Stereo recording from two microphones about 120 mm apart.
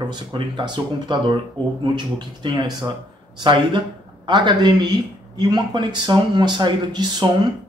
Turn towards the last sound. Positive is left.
turn(degrees=-40)  # may be behind; listen again after turning